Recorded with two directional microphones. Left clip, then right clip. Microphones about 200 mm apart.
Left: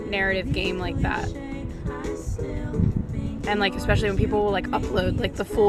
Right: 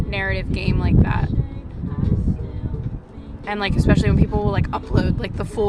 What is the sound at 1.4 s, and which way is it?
Music, 45° left (ahead or behind).